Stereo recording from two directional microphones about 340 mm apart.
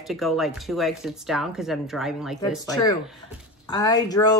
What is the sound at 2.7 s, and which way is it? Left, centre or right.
Speech, centre.